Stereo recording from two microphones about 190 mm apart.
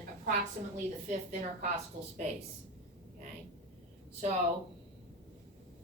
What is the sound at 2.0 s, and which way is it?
Speech, 45° right (ahead or behind).